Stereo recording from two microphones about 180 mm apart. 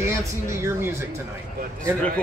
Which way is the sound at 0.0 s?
15° right (ahead or behind).